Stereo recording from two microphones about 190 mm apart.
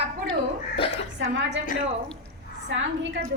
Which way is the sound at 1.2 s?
70° right (ahead or behind).